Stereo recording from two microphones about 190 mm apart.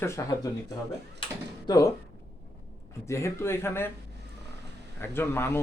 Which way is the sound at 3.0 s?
15° left (ahead or behind).